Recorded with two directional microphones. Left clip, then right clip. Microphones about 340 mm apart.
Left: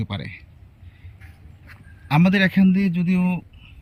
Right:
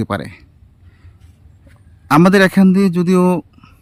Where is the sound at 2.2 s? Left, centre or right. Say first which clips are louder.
Right 8 dB; centre.